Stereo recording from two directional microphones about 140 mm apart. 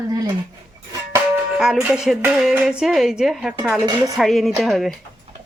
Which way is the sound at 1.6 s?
5° right (ahead or behind).